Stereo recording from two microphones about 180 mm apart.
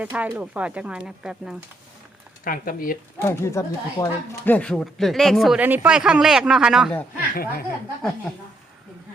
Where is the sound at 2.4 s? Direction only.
50° left (ahead or behind).